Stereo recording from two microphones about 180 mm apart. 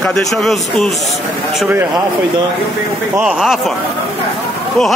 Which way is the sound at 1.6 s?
10° right (ahead or behind).